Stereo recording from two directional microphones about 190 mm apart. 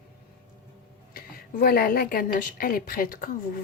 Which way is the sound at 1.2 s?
55° left (ahead or behind).